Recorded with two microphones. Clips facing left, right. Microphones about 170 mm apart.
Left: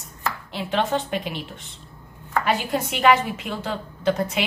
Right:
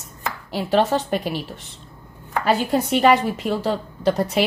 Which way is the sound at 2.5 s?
35° right (ahead or behind).